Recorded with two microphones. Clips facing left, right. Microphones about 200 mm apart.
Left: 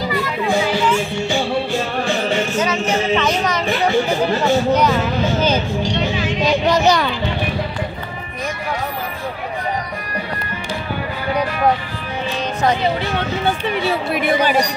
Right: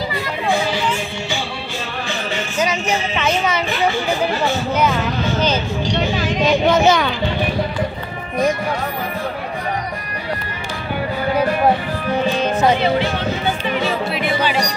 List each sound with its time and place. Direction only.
2.6 s a sound: 10° right (ahead or behind)
6.4 s speech: centre (ahead or behind)
14.1 s speech: 45° left (ahead or behind)